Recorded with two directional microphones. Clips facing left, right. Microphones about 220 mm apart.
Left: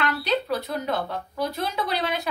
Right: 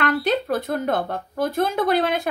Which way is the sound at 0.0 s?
50° right (ahead or behind).